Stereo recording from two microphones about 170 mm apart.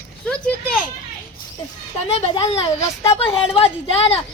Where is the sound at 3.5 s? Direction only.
35° left (ahead or behind).